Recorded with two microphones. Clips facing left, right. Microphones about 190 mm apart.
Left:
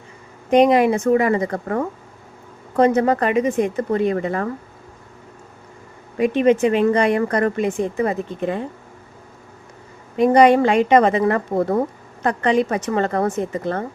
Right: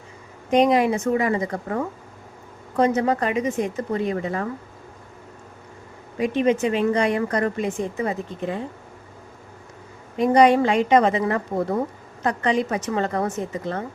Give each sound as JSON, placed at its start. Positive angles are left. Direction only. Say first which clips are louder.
{"t": 0.5, "sound": "speech", "louder": "left 4 dB", "side_deg": 60}
{"t": 6.1, "sound": "speech", "louder": "left 4 dB", "side_deg": 60}
{"t": 10.2, "sound": "speech", "louder": "left 3 dB", "side_deg": 60}